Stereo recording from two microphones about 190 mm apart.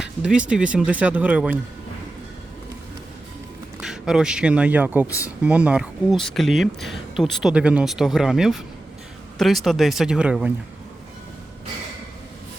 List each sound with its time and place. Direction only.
0.0 s speech: 5° right (ahead or behind)
3.8 s speech: 5° right (ahead or behind)
5.0 s speech: 15° left (ahead or behind)
5.4 s speech: 5° right (ahead or behind)